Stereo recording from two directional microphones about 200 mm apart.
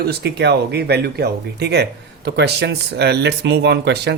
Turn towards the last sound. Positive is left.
turn(degrees=-55)  # may be behind; listen again after turning